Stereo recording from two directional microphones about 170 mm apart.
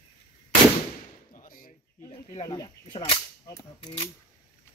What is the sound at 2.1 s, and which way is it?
Cap gun, 25° left (ahead or behind).